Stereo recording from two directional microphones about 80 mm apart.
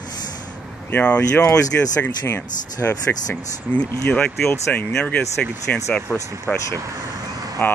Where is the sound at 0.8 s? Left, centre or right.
Left.